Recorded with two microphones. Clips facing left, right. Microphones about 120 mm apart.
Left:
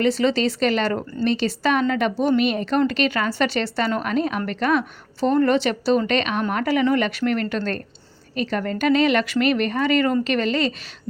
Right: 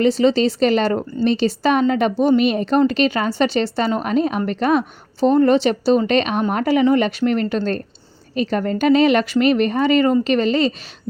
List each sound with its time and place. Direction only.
0.0 s a woman's voice: 30° right (ahead or behind)